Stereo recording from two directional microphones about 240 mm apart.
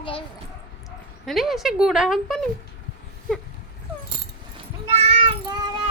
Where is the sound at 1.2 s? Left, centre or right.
Centre.